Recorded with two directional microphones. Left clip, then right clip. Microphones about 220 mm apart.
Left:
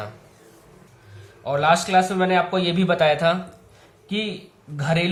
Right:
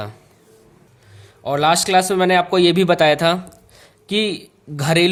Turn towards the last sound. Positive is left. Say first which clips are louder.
# right 6 dB
turn(degrees=-50)  # may be behind; listen again after turning